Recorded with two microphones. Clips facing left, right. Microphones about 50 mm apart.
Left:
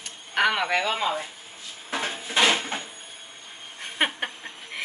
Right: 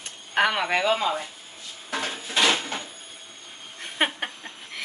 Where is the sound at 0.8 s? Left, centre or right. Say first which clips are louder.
Right 2 dB; centre.